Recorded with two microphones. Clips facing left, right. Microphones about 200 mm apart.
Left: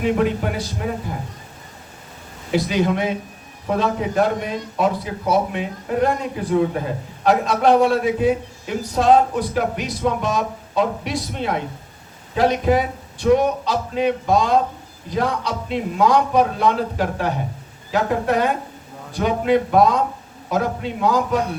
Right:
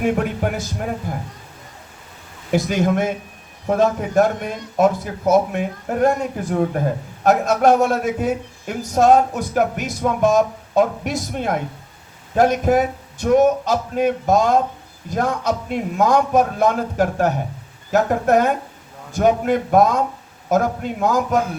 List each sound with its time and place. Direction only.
0.0 s a man's voice: 50° right (ahead or behind)
2.5 s a man's voice: 50° right (ahead or behind)